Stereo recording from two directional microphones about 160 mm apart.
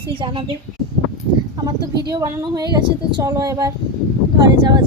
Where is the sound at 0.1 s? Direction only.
30° right (ahead or behind).